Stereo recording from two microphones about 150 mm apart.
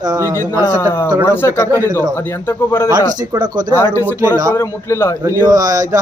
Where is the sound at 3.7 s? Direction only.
15° left (ahead or behind).